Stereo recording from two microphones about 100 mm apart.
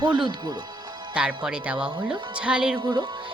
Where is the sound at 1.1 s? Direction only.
10° right (ahead or behind).